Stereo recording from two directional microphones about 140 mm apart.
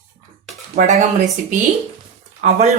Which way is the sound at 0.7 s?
60° right (ahead or behind).